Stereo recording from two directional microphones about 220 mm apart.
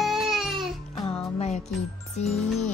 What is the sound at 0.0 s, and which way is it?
Music, centre (ahead or behind).